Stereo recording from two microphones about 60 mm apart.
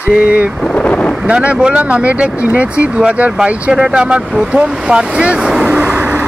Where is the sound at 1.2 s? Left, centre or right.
Centre.